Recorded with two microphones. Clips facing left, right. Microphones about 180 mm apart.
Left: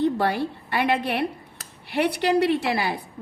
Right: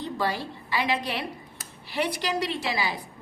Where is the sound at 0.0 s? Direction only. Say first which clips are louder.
Left 7 dB; 60° left (ahead or behind).